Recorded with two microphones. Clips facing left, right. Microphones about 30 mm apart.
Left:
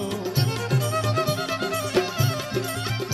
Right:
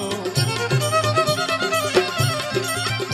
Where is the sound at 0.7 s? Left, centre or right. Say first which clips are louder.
Right 6 dB; right.